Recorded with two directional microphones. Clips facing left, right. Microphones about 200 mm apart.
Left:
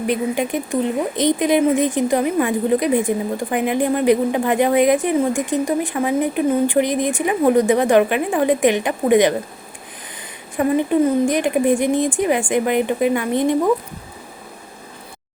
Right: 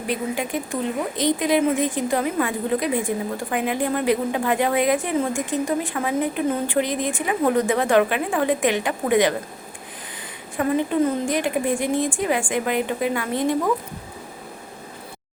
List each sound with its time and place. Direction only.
0.1 s a woman's voice: 20° left (ahead or behind)
11.3 s a woman's voice: 15° left (ahead or behind)